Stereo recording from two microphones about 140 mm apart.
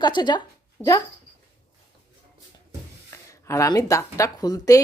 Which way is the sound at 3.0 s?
20° left (ahead or behind).